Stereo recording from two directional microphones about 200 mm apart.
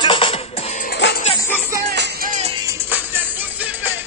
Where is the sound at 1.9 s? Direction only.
55° right (ahead or behind).